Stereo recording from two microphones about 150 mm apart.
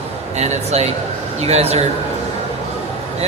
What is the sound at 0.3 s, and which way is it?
A man's voice, 45° right (ahead or behind).